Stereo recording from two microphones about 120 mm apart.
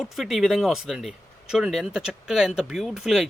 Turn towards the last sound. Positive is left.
turn(degrees=0)  # may be behind; listen again after turning